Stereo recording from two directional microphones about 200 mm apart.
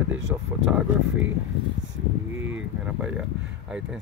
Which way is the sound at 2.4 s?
70° right (ahead or behind).